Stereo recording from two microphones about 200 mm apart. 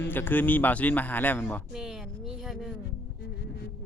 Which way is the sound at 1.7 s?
Centre (ahead or behind).